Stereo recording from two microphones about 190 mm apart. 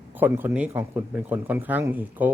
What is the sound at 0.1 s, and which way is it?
Speech, 10° right (ahead or behind).